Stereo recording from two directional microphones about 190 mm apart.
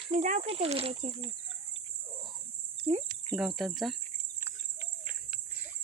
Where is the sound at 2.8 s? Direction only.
30° right (ahead or behind).